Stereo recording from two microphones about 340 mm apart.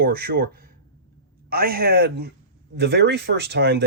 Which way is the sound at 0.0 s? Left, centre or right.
Right.